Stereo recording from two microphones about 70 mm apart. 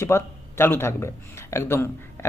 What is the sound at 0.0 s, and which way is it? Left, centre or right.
A man's voice, left.